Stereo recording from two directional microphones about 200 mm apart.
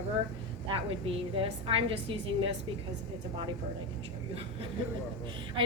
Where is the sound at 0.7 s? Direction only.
25° right (ahead or behind).